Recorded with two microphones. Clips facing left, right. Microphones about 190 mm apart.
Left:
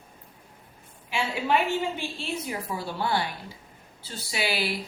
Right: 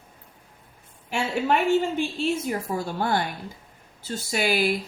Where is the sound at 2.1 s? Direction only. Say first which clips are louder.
Right 7 dB; 45° right (ahead or behind).